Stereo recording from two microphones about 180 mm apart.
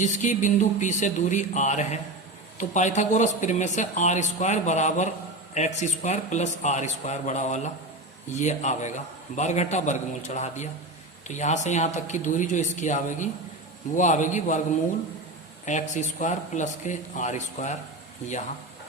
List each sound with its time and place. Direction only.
0.0 s a man's voice: 45° left (ahead or behind)
15.6 s speech: 45° left (ahead or behind)